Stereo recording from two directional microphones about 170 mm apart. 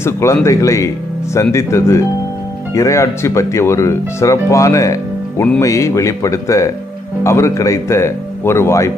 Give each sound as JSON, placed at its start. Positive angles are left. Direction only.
{"t": 0.0, "sound": "speech", "side_deg": 15}